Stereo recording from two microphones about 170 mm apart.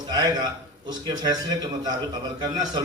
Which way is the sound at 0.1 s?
25° right (ahead or behind).